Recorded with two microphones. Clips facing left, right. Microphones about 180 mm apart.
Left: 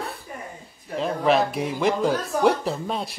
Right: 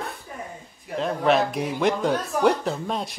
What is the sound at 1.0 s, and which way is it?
Speech, centre (ahead or behind).